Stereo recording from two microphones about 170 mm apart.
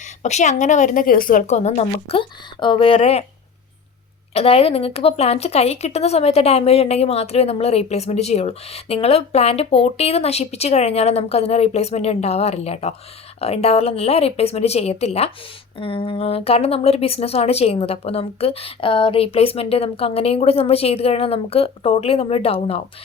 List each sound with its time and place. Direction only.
0.0 s speech: 40° left (ahead or behind)
4.4 s speech: 35° left (ahead or behind)